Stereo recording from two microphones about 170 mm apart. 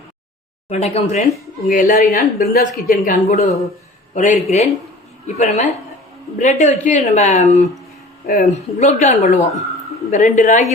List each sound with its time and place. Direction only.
0.7 s speech: 40° left (ahead or behind)
1.6 s a woman's voice: 50° left (ahead or behind)